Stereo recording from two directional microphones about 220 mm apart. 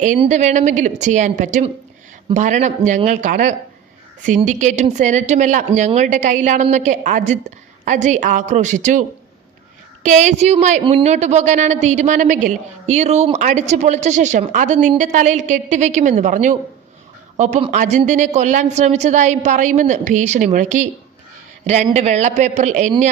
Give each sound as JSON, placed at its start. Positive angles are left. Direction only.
{"t": 0.0, "sound": "speech", "side_deg": -35}